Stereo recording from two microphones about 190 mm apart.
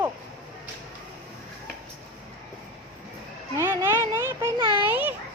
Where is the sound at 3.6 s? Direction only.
15° right (ahead or behind).